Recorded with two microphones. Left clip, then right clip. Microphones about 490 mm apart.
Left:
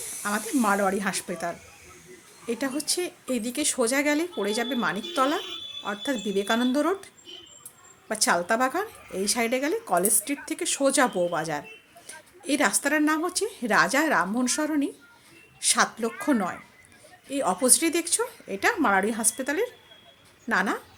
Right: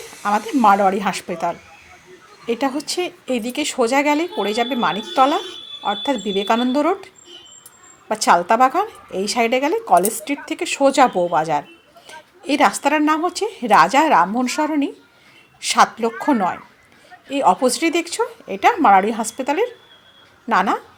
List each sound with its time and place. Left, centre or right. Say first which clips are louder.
0.2 s speech: right 10 dB; left